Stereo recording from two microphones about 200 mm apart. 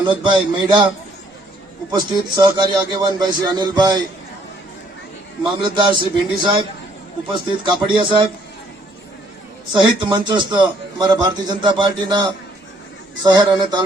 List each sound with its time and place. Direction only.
0.0 s a man's voice: 25° right (ahead or behind)
1.9 s a man's voice: 20° right (ahead or behind)
5.6 s a man's voice: 25° right (ahead or behind)
9.8 s a man's voice: 25° right (ahead or behind)